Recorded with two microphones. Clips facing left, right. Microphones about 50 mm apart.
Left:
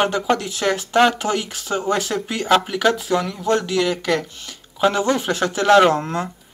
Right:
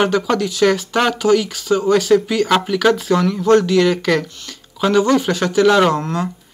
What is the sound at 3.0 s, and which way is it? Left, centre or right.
Speech, centre.